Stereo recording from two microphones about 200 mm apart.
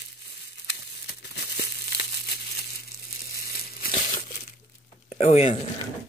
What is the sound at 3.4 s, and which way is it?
Crumpling, 45° left (ahead or behind).